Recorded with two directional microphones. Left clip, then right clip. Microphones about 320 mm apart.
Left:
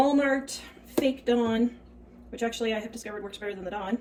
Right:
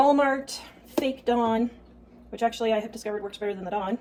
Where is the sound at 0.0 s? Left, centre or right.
Centre.